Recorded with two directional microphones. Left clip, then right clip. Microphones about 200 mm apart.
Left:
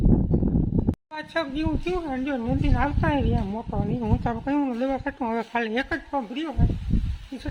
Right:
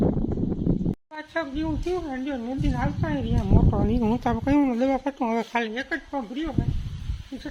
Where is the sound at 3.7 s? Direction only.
20° right (ahead or behind).